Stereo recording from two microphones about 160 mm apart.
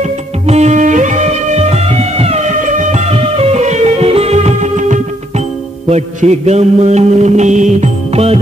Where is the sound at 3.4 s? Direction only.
40° right (ahead or behind).